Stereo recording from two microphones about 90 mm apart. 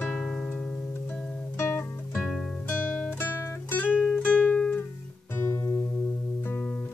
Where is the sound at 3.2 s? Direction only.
25° left (ahead or behind).